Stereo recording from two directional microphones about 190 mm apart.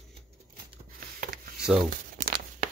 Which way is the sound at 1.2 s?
50° right (ahead or behind).